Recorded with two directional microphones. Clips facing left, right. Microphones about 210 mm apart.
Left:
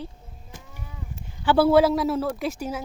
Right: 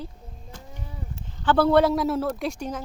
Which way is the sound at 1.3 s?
10° left (ahead or behind).